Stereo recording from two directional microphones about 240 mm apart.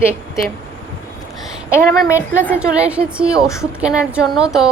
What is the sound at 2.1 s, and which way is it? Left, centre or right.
A woman's voice, centre.